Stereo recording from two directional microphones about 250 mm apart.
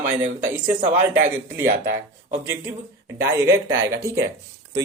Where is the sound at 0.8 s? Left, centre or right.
Right.